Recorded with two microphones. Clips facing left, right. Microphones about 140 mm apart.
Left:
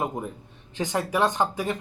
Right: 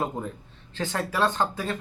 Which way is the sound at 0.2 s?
15° left (ahead or behind).